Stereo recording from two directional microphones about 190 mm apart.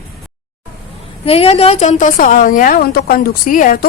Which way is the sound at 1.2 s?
30° left (ahead or behind).